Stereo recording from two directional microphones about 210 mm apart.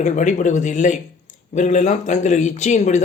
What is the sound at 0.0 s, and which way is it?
A man's voice, 35° left (ahead or behind).